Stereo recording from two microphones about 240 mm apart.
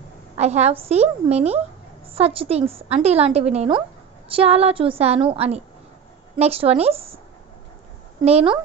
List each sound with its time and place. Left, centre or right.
0.4 s a woman's voice: right
8.2 s a woman's voice: right